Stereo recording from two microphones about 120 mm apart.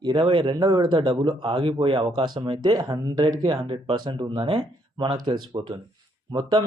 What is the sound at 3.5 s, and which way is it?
Speech, 45° right (ahead or behind).